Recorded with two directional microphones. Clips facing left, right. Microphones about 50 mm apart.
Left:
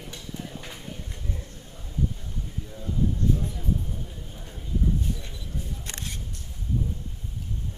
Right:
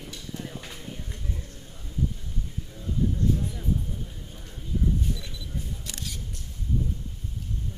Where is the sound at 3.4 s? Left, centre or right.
Centre.